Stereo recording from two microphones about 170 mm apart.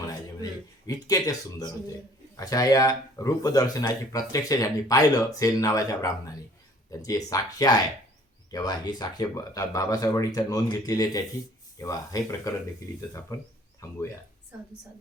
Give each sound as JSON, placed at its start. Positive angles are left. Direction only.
{"t": 1.0, "sound": "speech", "side_deg": 20}